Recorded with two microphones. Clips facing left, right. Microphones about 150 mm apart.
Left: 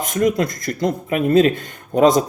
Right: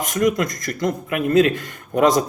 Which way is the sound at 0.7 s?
30° left (ahead or behind).